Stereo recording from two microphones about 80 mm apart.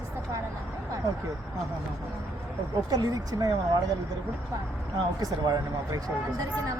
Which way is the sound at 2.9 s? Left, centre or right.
Right.